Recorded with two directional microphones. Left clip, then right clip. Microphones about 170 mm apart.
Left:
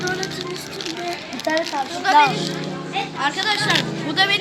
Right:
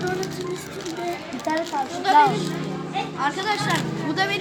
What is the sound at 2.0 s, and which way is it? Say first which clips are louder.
Speech: left 2 dB; 10° left (ahead or behind).